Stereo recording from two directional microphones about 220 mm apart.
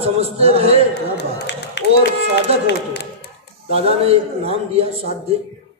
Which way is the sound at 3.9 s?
25° right (ahead or behind).